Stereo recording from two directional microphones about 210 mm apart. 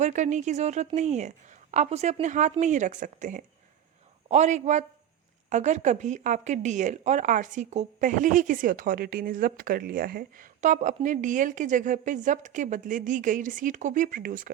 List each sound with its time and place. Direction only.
0.0 s speech: 35° right (ahead or behind)